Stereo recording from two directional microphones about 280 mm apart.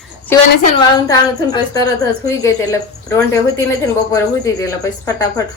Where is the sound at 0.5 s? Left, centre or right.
Left.